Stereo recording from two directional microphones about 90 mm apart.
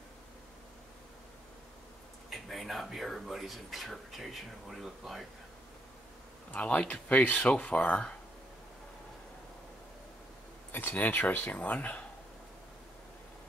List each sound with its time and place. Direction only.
2.2 s speech: centre (ahead or behind)
6.5 s speech: 15° left (ahead or behind)
10.7 s speech: 20° left (ahead or behind)